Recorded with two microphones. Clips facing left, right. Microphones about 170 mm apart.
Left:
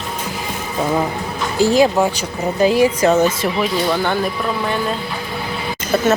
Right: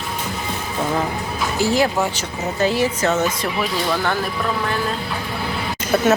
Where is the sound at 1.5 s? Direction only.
15° left (ahead or behind).